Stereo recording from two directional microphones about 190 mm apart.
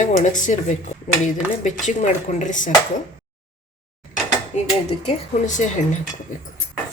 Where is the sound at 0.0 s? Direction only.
40° left (ahead or behind).